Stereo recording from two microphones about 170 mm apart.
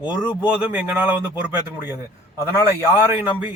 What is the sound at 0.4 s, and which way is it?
Speech, 10° right (ahead or behind).